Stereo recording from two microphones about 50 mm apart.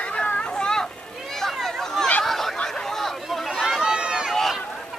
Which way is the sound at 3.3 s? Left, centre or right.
Centre.